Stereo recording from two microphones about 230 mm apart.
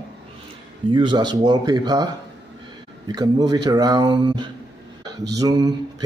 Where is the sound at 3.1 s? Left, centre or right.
Centre.